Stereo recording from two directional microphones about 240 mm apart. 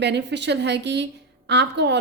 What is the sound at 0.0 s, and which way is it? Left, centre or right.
A woman's voice, right.